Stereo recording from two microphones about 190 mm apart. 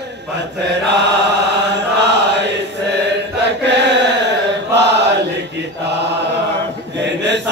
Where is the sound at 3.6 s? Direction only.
65° right (ahead or behind).